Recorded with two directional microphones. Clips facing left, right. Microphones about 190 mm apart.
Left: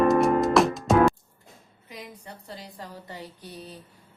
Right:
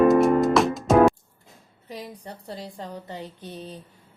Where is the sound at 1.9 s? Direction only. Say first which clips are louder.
Right 5 dB; 35° right (ahead or behind).